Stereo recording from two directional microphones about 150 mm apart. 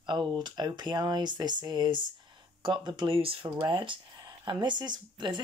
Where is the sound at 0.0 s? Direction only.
30° right (ahead or behind).